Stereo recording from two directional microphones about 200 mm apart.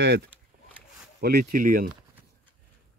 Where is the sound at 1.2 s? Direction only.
50° right (ahead or behind).